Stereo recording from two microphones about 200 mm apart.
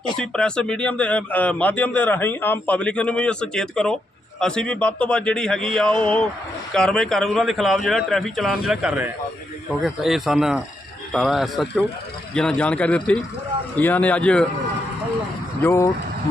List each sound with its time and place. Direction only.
0.2 s a man's voice: 5° left (ahead or behind)
15.6 s a man's voice: 15° left (ahead or behind)